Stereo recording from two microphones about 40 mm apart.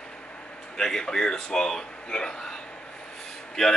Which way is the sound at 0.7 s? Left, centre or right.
Centre.